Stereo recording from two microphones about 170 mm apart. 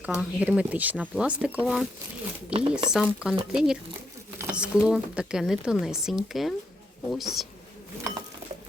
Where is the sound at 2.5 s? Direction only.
30° right (ahead or behind).